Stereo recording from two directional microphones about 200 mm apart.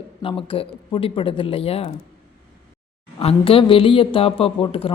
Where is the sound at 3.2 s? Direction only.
30° left (ahead or behind).